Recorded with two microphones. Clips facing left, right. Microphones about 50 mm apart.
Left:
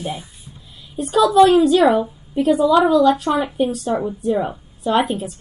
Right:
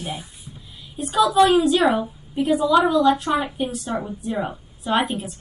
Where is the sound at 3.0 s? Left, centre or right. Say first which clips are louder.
Left 2 dB; centre.